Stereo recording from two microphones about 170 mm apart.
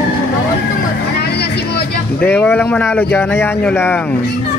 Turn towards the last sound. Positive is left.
turn(degrees=15)  # may be behind; listen again after turning